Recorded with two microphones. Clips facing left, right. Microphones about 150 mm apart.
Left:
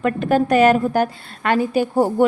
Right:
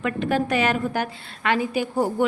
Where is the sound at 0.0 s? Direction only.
45° left (ahead or behind).